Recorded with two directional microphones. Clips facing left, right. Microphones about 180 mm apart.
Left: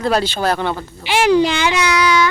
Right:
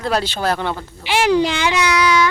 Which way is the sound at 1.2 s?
60° left (ahead or behind).